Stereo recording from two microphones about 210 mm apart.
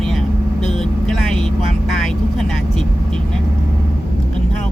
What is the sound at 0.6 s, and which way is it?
Vehicle, centre (ahead or behind).